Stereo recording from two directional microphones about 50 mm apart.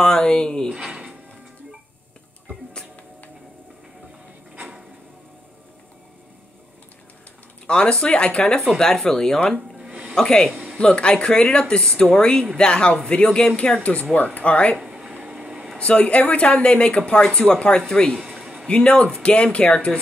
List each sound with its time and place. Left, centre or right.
0.0 s speech: centre
7.6 s speech: centre
9.8 s a sound: right
10.1 s speech: centre
14.1 s speech: left
15.1 s a sound: right
15.8 s speech: left
18.4 s a sound: centre
18.9 s speech: centre